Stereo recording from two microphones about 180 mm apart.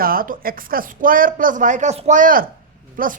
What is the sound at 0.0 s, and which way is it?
A woman's voice, 55° right (ahead or behind).